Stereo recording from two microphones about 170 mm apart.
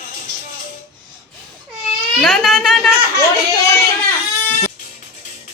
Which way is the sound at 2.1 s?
Centre (ahead or behind).